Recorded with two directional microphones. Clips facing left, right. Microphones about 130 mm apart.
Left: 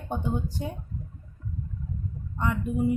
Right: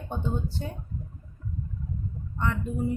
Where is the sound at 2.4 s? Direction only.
15° left (ahead or behind).